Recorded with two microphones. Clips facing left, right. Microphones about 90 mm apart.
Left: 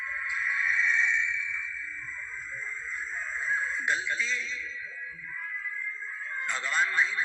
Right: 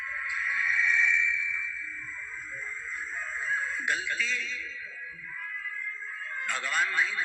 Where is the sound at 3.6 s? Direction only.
55° right (ahead or behind).